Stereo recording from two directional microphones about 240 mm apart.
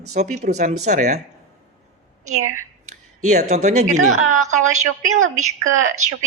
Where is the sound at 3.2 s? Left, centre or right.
Right.